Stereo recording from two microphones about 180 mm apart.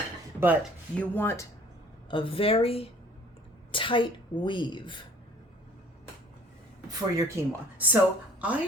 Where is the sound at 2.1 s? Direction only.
30° left (ahead or behind).